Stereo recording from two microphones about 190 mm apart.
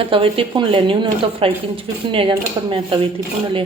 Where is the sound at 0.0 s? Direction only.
30° right (ahead or behind).